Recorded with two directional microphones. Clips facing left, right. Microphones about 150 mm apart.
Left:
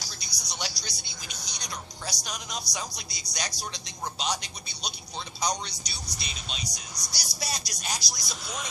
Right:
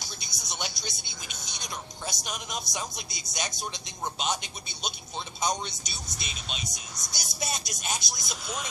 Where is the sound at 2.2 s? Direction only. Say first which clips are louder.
Right 1 dB; 5° right (ahead or behind).